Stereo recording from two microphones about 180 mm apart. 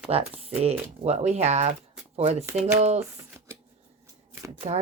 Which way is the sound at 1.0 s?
40° right (ahead or behind).